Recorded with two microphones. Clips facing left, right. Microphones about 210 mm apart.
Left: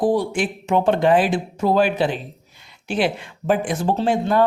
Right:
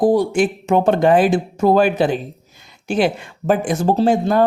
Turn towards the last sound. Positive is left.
turn(degrees=-40)  # may be behind; listen again after turning